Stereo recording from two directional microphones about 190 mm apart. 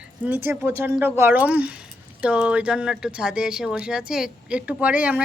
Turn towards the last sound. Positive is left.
turn(degrees=-10)  # may be behind; listen again after turning